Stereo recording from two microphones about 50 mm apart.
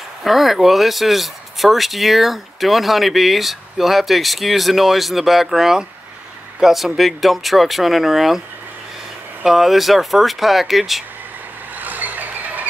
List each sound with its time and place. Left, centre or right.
0.2 s speech: centre
9.4 s speech: centre
11.7 s vehicle: right